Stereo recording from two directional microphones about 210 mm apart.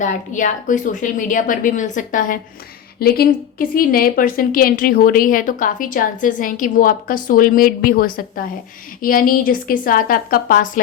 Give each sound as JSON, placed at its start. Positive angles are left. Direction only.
{"t": 0.0, "sound": "a woman's voice", "side_deg": 35}